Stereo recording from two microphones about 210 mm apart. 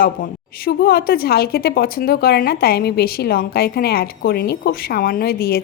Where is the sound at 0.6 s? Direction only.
45° left (ahead or behind).